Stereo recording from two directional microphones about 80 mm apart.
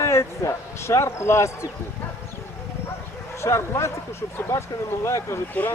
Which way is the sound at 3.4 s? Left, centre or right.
Left.